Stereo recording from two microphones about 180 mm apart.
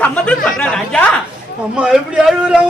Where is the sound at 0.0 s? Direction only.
5° left (ahead or behind).